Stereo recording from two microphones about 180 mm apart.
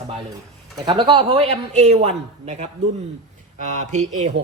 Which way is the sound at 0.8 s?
25° right (ahead or behind).